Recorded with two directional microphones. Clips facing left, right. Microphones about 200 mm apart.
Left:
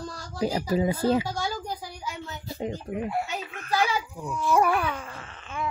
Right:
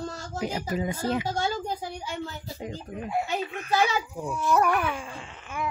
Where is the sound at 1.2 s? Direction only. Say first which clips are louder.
Right 2 dB; 25° right (ahead or behind).